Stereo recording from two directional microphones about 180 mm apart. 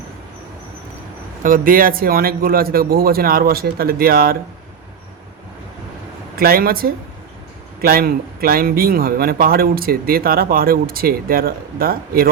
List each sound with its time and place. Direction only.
1.4 s speech: 50° right (ahead or behind)
6.3 s speech: 55° right (ahead or behind)